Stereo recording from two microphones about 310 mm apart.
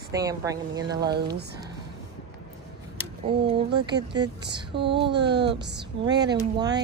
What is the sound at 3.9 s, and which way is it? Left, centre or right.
Speech, centre.